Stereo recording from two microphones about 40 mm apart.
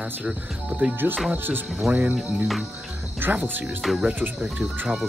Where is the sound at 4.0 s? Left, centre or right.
Right.